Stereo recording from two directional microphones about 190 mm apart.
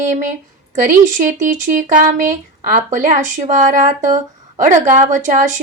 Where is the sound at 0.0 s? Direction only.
40° right (ahead or behind).